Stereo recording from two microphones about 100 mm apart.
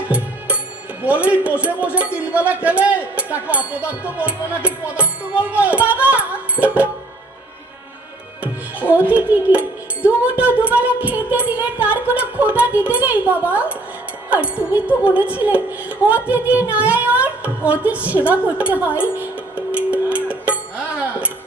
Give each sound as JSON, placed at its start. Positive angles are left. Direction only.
{"t": 1.0, "sound": "music", "side_deg": -15}
{"t": 8.8, "sound": "music", "side_deg": -15}
{"t": 14.3, "sound": "speech", "side_deg": -15}
{"t": 14.8, "sound": "music", "side_deg": -15}
{"t": 18.9, "sound": "a woman's voice", "side_deg": 20}
{"t": 19.2, "sound": "music", "side_deg": -15}